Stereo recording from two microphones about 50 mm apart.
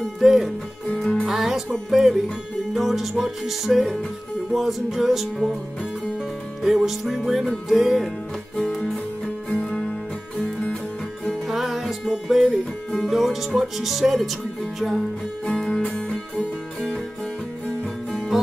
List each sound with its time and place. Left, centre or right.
0.2 s speech: centre
1.2 s music: centre
6.6 s music: centre
8.5 s music: centre
11.4 s music: centre
15.4 s music: centre